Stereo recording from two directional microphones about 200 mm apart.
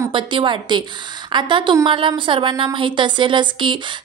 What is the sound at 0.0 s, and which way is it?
Speech, 25° right (ahead or behind).